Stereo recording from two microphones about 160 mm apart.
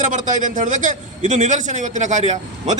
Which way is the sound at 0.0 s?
50° right (ahead or behind).